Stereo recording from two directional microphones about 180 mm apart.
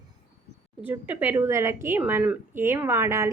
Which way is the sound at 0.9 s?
10° right (ahead or behind).